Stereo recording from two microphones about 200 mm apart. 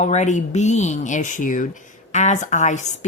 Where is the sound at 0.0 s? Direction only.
35° left (ahead or behind).